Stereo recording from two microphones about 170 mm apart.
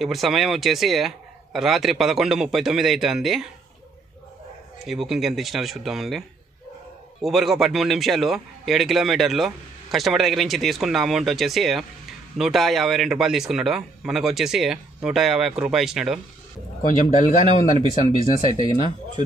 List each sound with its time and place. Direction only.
0.0 s a man's voice: centre (ahead or behind)
4.8 s a man's voice: centre (ahead or behind)
16.8 s a man's voice: 50° left (ahead or behind)